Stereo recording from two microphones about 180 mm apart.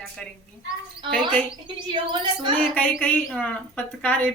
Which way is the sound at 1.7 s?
25° right (ahead or behind).